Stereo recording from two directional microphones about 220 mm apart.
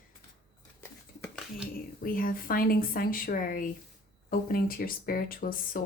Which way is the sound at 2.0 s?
40° left (ahead or behind).